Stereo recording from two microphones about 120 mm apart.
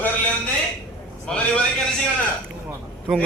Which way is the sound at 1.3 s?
10° left (ahead or behind).